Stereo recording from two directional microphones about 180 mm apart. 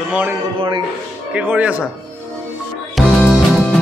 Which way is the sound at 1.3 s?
10° right (ahead or behind).